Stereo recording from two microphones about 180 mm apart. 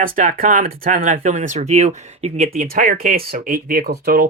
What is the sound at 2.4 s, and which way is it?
Speech, 50° right (ahead or behind).